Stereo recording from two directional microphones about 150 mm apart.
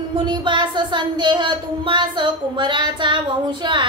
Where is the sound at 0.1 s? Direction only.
30° right (ahead or behind).